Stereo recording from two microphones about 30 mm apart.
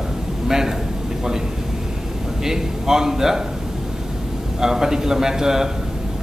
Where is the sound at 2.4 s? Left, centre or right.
Centre.